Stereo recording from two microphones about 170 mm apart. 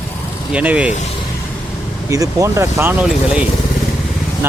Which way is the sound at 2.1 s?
20° right (ahead or behind).